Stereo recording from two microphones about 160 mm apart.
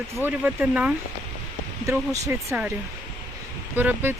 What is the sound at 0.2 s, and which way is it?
Speech, 10° right (ahead or behind).